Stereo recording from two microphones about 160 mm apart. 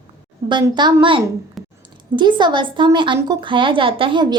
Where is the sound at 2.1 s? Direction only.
30° right (ahead or behind).